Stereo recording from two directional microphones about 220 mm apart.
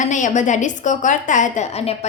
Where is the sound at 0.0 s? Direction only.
35° left (ahead or behind).